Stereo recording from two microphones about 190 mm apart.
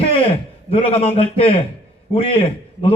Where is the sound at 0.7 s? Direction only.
30° left (ahead or behind).